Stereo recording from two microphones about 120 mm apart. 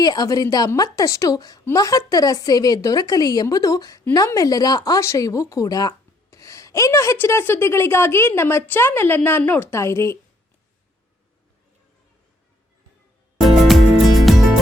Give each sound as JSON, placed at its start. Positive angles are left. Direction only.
{"t": 0.0, "sound": "a woman's voice", "side_deg": 35}
{"t": 13.7, "sound": "music", "side_deg": 0}